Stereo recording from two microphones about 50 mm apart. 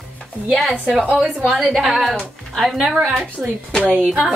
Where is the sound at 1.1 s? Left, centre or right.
Centre.